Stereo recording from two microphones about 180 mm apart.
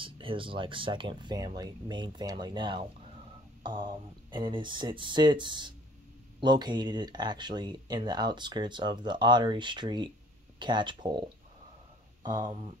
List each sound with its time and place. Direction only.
0.0 s speech: 30° right (ahead or behind)